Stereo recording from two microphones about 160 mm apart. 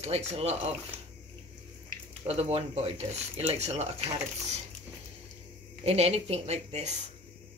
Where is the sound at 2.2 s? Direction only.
40° right (ahead or behind).